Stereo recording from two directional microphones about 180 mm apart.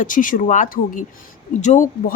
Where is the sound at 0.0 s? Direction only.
50° left (ahead or behind).